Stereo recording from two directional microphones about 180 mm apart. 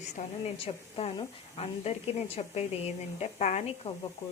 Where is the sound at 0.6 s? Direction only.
30° left (ahead or behind).